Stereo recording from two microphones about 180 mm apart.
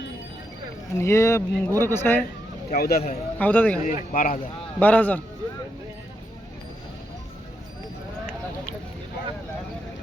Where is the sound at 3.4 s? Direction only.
10° left (ahead or behind).